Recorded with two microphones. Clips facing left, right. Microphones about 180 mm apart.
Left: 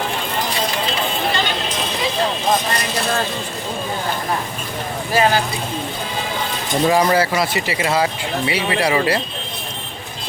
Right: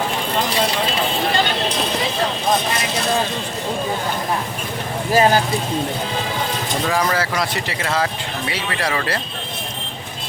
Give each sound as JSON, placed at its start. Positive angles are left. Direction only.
{"t": 5.1, "sound": "speech", "side_deg": -45}
{"t": 6.8, "sound": "speech", "side_deg": 15}
{"t": 7.3, "sound": "speech", "side_deg": 5}